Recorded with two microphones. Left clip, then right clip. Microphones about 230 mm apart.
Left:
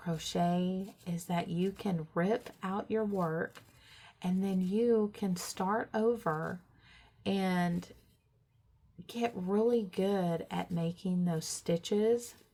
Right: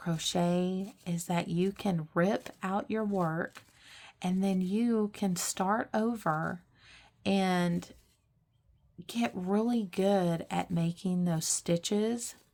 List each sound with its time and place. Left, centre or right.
0.0 s speech: right
9.0 s speech: right